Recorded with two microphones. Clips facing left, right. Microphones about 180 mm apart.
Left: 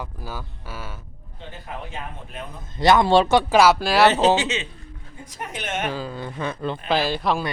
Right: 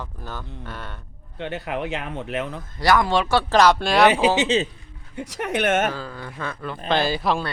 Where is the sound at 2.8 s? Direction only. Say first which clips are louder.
Left 3 dB; 25° left (ahead or behind).